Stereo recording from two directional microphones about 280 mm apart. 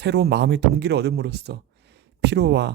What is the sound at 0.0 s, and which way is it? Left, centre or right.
Speech, right.